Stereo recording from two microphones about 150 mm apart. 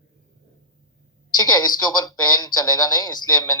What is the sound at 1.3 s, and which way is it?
Speech, 25° left (ahead or behind).